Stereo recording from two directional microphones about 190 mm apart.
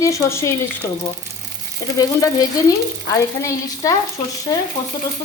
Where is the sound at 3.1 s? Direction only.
15° left (ahead or behind).